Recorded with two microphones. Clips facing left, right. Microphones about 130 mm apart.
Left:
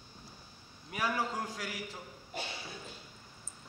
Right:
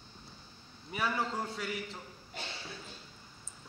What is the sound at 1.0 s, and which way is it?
A man's voice, 10° left (ahead or behind).